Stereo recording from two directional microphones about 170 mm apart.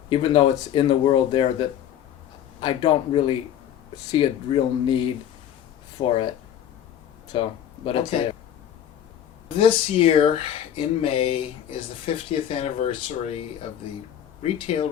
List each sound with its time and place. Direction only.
0.1 s speech: 30° left (ahead or behind)
7.3 s speech: 30° left (ahead or behind)
9.6 s speech: 35° left (ahead or behind)
14.4 s speech: 35° left (ahead or behind)